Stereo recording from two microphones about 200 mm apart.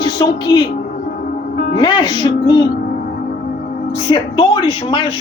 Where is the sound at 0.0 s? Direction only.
20° left (ahead or behind).